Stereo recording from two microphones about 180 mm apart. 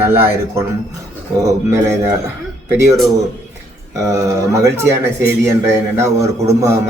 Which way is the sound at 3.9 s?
15° right (ahead or behind).